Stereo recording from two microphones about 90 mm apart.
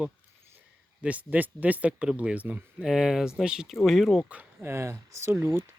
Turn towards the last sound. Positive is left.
turn(degrees=-25)  # may be behind; listen again after turning